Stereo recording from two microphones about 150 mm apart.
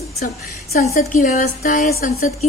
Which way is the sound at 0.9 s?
65° left (ahead or behind).